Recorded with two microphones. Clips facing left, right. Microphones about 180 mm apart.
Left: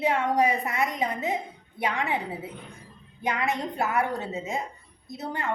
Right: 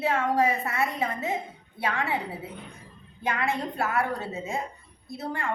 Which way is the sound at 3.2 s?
20° left (ahead or behind).